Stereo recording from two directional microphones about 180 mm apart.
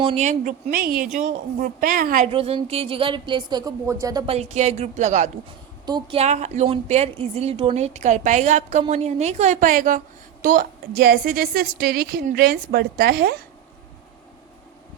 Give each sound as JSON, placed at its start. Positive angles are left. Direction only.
{"t": 0.0, "sound": "a woman's voice", "side_deg": -35}
{"t": 2.3, "sound": "speech", "side_deg": -30}
{"t": 4.3, "sound": "a woman's voice", "side_deg": -40}
{"t": 5.8, "sound": "a woman's voice", "side_deg": -25}
{"t": 6.1, "sound": "a woman's voice", "side_deg": -40}